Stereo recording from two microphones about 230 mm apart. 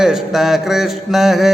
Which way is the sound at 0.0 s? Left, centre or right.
Centre.